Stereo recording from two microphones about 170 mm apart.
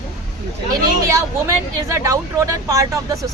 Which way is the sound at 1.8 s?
20° right (ahead or behind).